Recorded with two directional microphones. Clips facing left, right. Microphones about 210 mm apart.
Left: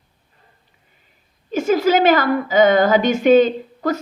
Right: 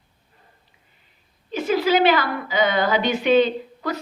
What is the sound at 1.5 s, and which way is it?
A woman's voice, 45° left (ahead or behind).